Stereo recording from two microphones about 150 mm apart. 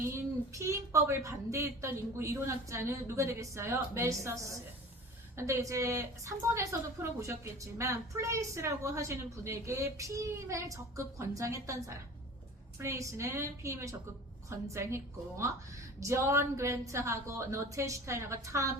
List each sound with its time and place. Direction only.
0.0 s a woman's voice: 20° right (ahead or behind)
12.8 s a woman's voice: 20° right (ahead or behind)